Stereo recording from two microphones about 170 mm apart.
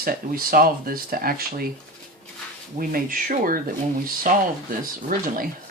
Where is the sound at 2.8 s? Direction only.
55° right (ahead or behind).